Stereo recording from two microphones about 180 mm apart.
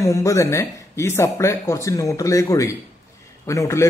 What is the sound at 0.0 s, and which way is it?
A man's voice, 15° left (ahead or behind).